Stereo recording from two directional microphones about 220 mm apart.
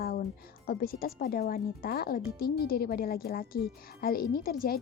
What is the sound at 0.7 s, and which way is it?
Speech, 45° left (ahead or behind).